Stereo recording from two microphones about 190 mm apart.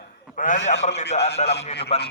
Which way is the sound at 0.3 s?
40° left (ahead or behind).